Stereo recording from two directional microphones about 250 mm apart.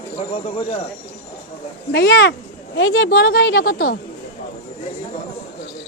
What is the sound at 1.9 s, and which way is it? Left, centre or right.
A woman's voice, left.